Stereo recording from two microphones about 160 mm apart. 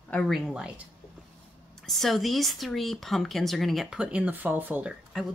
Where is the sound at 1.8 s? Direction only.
Centre (ahead or behind).